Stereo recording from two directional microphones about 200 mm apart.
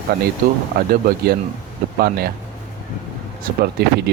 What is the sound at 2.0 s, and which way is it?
Speech, 50° right (ahead or behind).